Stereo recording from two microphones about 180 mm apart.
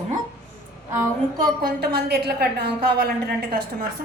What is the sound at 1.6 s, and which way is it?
A woman's voice, 60° right (ahead or behind).